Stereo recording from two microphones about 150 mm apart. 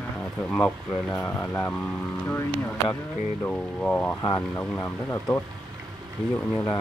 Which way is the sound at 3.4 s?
10° left (ahead or behind).